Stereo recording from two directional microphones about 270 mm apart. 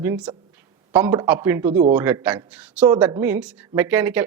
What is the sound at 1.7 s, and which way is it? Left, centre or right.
Speech, right.